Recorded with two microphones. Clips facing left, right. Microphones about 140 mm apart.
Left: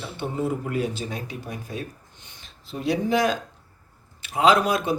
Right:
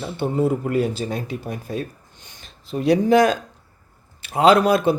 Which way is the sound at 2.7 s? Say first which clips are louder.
Right 7 dB; 65° right (ahead or behind).